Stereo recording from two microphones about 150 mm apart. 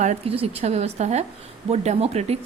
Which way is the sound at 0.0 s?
50° right (ahead or behind).